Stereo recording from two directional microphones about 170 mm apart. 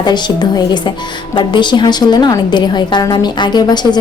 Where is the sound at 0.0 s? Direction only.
25° left (ahead or behind).